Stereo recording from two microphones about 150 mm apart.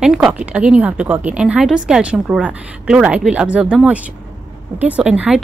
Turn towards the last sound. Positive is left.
turn(degrees=-5)  # may be behind; listen again after turning